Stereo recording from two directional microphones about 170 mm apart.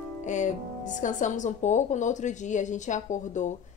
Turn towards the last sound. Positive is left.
turn(degrees=45)  # may be behind; listen again after turning